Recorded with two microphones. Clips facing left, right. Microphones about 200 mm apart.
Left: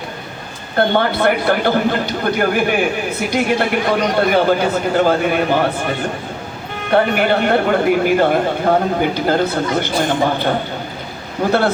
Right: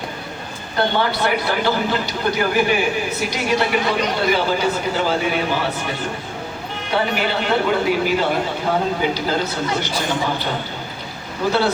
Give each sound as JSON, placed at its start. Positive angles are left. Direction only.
{"t": 0.8, "sound": "a man's voice", "side_deg": 55}
{"t": 6.9, "sound": "a man's voice", "side_deg": 55}